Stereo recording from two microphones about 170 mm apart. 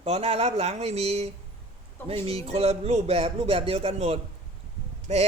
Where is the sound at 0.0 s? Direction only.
35° right (ahead or behind).